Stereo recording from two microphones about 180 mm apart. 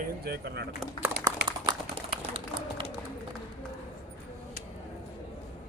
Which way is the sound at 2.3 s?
30° right (ahead or behind).